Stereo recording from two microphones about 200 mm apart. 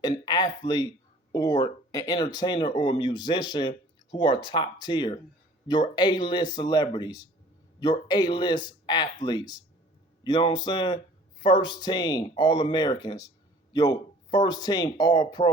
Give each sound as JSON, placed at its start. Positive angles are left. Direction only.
{"t": 0.0, "sound": "speech", "side_deg": 20}